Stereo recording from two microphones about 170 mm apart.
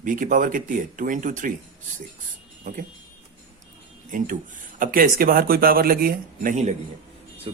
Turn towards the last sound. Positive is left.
turn(degrees=-30)  # may be behind; listen again after turning